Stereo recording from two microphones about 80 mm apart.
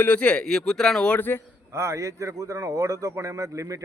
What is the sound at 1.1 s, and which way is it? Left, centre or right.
Speech, left.